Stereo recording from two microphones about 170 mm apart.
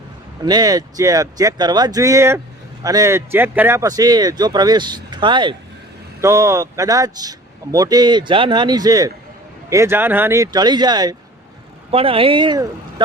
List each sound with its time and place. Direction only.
0.4 s a man's voice: 25° right (ahead or behind)
6.2 s a man's voice: 20° right (ahead or behind)
11.9 s speech: 35° right (ahead or behind)